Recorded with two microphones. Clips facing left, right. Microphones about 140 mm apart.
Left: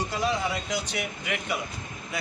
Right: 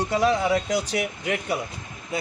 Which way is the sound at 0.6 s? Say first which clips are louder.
Right 6 dB; 40° right (ahead or behind).